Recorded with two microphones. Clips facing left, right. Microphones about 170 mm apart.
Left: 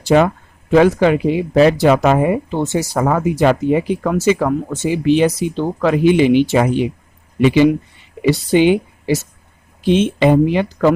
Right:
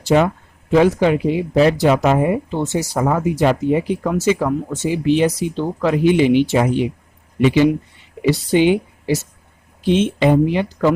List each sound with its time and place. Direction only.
0.1 s speech: 80° left
8.2 s speech: 90° left